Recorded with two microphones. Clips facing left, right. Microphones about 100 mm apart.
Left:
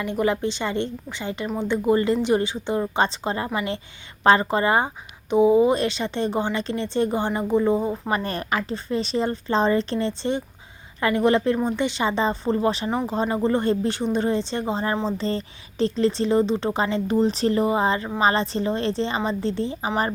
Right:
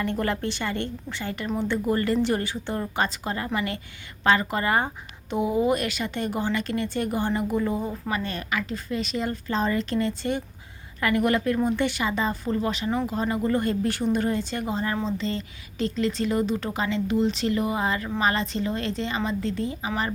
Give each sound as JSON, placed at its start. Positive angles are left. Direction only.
{"t": 0.0, "sound": "a woman's voice", "side_deg": 15}
{"t": 8.1, "sound": "a woman's voice", "side_deg": 40}